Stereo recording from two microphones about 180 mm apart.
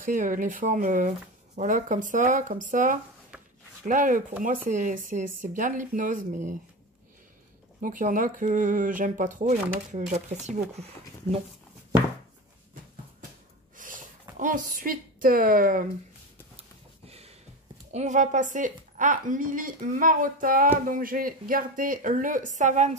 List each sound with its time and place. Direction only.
0.0 s speech: 50° right (ahead or behind)
7.8 s speech: 50° right (ahead or behind)
13.7 s a woman's voice: 45° right (ahead or behind)
17.1 s a sound: 35° right (ahead or behind)
17.9 s speech: 45° right (ahead or behind)